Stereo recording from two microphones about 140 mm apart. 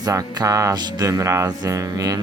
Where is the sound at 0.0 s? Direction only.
25° right (ahead or behind).